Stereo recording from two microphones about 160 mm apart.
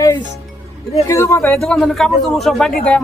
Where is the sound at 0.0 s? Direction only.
25° left (ahead or behind).